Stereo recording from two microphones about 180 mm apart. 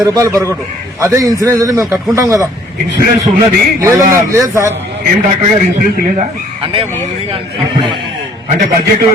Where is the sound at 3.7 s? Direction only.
15° right (ahead or behind).